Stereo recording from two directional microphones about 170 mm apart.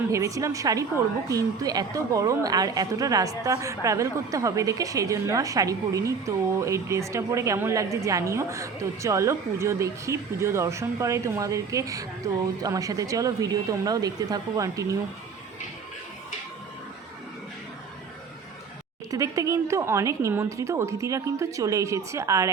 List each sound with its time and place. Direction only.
0.1 s a woman's voice: 20° right (ahead or behind)
19.1 s a woman's voice: 20° right (ahead or behind)